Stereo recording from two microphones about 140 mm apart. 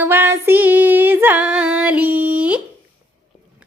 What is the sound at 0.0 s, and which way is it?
Female singing, 15° right (ahead or behind).